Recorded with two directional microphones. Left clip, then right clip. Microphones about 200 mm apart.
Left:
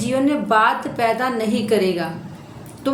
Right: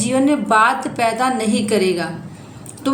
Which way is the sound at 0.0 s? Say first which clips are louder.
Right 3 dB; 20° right (ahead or behind).